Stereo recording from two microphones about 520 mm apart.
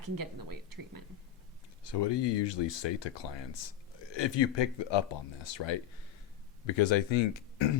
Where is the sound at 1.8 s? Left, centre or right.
Left.